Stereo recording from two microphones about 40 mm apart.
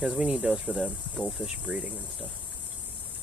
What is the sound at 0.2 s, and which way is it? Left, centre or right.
Speech, right.